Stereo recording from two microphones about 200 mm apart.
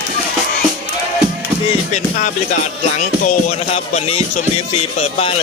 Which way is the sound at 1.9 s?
35° left (ahead or behind).